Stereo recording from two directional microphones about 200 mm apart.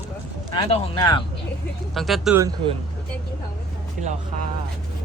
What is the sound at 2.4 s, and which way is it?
Speech, 20° right (ahead or behind).